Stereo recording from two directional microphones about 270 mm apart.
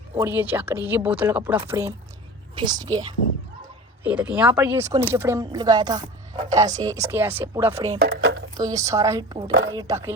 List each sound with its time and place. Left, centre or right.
0.2 s speech: centre
8.0 s a sound: right
8.5 s speech: centre
9.5 s a woman's voice: right
9.7 s speech: centre